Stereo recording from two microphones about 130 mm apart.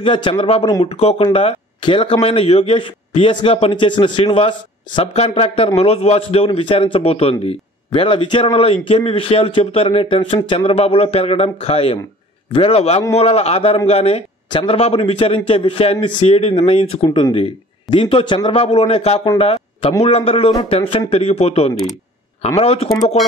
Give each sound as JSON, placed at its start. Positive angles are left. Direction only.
{"t": 0.0, "sound": "a man's voice", "side_deg": 40}
{"t": 5.0, "sound": "a man's voice", "side_deg": 55}